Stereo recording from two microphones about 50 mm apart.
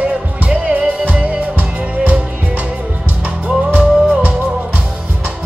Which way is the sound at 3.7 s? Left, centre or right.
Right.